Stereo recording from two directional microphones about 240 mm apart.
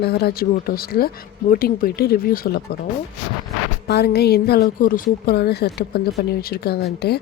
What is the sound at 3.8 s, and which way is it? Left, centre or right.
Speech, left.